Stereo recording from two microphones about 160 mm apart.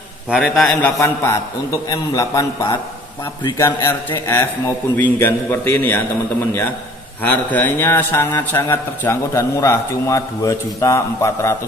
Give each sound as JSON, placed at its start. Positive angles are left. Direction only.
{"t": 0.4, "sound": "a man's voice", "side_deg": 5}
{"t": 0.8, "sound": "a man's voice", "side_deg": 15}
{"t": 7.2, "sound": "a man's voice", "side_deg": 10}